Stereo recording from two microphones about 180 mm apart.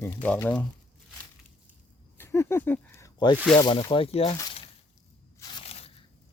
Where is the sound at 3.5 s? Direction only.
25° left (ahead or behind).